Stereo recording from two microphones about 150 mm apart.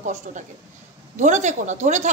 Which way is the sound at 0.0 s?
55° right (ahead or behind).